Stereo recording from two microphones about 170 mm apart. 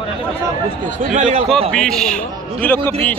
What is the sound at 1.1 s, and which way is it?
Speech, 40° right (ahead or behind).